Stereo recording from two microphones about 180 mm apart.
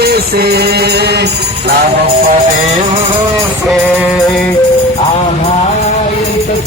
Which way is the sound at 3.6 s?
Centre (ahead or behind).